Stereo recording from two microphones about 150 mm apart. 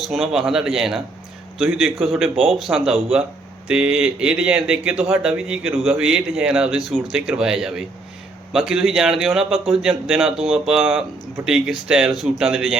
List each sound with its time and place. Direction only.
0.0 s speech: centre (ahead or behind)